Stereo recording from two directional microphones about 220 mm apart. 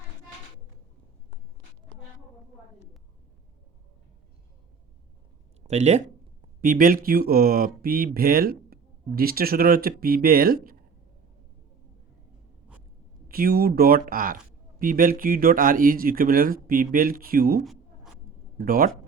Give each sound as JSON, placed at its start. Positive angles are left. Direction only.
{"t": 5.6, "sound": "speech", "side_deg": -30}
{"t": 13.2, "sound": "speech", "side_deg": -40}